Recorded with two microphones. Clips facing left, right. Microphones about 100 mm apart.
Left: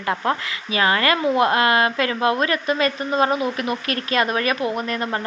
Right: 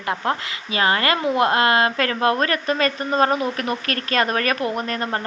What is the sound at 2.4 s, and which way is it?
Speech, 40° right (ahead or behind).